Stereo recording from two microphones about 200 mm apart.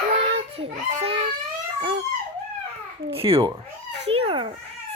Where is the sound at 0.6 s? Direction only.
30° right (ahead or behind).